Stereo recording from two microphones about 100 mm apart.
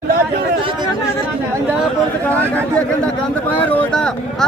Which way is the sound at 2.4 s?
15° left (ahead or behind).